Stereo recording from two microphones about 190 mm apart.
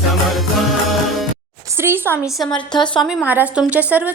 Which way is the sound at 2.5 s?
25° left (ahead or behind).